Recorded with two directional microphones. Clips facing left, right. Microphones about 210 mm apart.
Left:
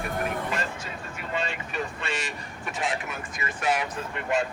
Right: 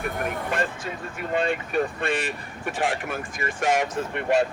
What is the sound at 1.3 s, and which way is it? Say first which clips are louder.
Speech: right 7 dB; 50° right (ahead or behind).